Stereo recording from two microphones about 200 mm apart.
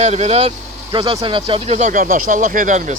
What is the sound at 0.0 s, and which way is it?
Speech, 35° right (ahead or behind).